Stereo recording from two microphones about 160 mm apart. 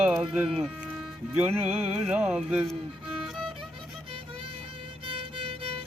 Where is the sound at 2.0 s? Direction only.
5° right (ahead or behind).